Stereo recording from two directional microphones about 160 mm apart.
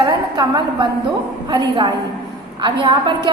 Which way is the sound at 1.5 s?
25° right (ahead or behind).